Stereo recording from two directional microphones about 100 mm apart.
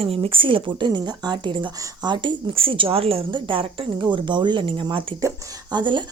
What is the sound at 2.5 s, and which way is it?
Speech, 65° right (ahead or behind).